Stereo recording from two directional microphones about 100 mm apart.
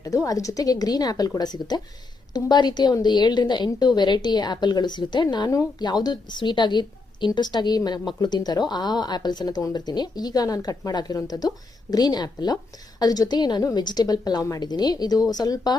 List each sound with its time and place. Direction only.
0.0 s a woman's voice: 35° left (ahead or behind)
5.5 s a woman's voice: 35° left (ahead or behind)